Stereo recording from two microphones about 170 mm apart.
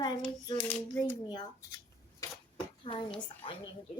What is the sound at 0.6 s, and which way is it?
Child singing, 10° left (ahead or behind).